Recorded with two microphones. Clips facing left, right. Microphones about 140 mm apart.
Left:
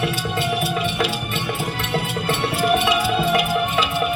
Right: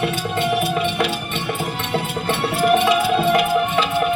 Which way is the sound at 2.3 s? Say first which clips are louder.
Right 3 dB; centre (ahead or behind).